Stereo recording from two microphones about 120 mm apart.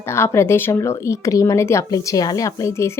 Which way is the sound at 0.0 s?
20° left (ahead or behind).